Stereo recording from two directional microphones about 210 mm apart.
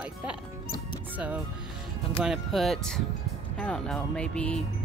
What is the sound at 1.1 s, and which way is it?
Speech, 5° right (ahead or behind).